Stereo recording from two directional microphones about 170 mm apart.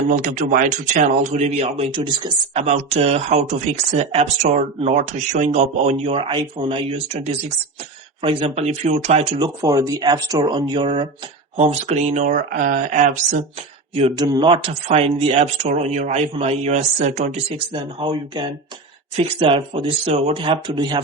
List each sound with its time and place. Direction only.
0.1 s speech: 50° right (ahead or behind)
9.4 s speech: 20° right (ahead or behind); by 13.4 s 50° right (ahead or behind)
14.2 s speech: 25° right (ahead or behind)